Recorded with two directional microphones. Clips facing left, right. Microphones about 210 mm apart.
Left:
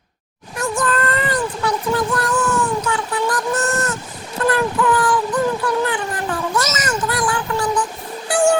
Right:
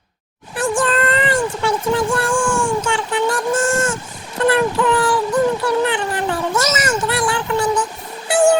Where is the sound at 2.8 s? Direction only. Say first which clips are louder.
Right 2 dB; 30° right (ahead or behind).